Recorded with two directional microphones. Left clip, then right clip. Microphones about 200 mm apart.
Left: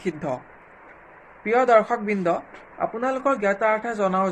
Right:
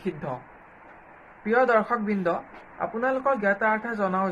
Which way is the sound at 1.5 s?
50° left (ahead or behind).